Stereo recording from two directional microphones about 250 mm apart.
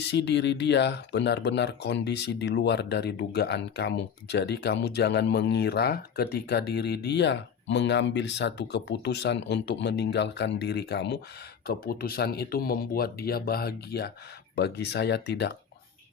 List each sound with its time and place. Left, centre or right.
0.1 s speech: left